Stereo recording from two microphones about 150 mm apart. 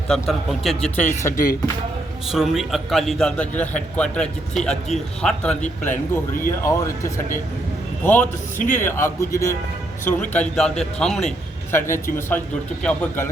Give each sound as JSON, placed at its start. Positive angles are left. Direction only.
{"t": 0.1, "sound": "a man's voice", "side_deg": 0}
{"t": 0.9, "sound": "speech", "side_deg": 15}
{"t": 2.2, "sound": "a man's voice", "side_deg": 0}
{"t": 5.9, "sound": "speech", "side_deg": 70}
{"t": 6.5, "sound": "speech", "side_deg": 20}
{"t": 8.5, "sound": "speech", "side_deg": 60}
{"t": 8.8, "sound": "a man's voice", "side_deg": 15}
{"t": 12.8, "sound": "speech", "side_deg": 10}